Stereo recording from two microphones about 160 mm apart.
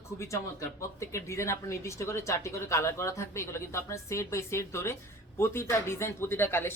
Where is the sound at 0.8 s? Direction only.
20° left (ahead or behind).